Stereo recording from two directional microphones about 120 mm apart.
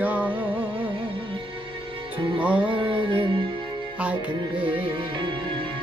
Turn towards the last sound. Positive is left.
turn(degrees=-40)  # may be behind; listen again after turning